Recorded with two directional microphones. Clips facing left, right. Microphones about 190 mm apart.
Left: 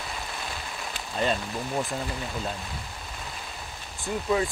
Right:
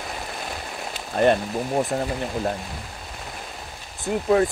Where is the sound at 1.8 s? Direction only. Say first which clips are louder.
Right 7 dB; 45° right (ahead or behind).